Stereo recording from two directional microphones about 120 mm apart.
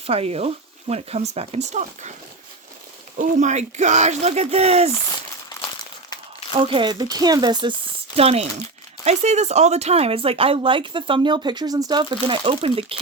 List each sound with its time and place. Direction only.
0.0 s speech: 55° right (ahead or behind); by 2.1 s 80° right
3.2 s speech: 90° right; by 4.9 s 60° right (ahead or behind)
6.5 s speech: 45° right (ahead or behind)
8.1 s speech: 55° right (ahead or behind)
9.0 s speech: 70° right (ahead or behind); by 12.1 s 35° right (ahead or behind)
12.3 s speech: 50° right (ahead or behind)